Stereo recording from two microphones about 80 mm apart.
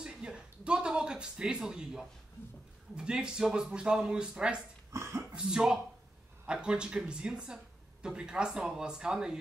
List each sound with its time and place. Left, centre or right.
0.0 s speech: centre
4.9 s a sound: right
5.3 s speech: centre